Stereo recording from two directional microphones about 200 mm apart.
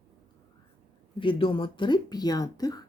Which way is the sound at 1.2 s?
25° left (ahead or behind).